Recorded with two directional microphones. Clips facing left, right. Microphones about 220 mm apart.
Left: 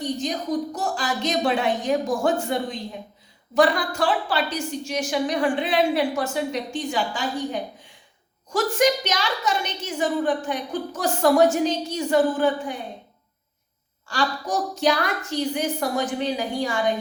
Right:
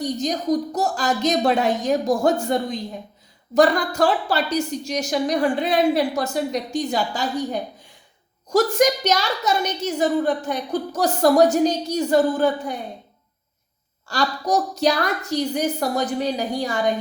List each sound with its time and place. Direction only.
0.0 s a woman's voice: 40° right (ahead or behind)
14.1 s a woman's voice: 40° right (ahead or behind)